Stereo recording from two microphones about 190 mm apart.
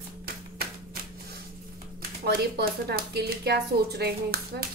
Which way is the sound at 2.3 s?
55° right (ahead or behind).